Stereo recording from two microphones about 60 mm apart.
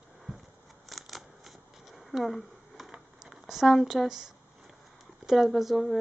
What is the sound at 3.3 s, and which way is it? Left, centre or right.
Speech, centre.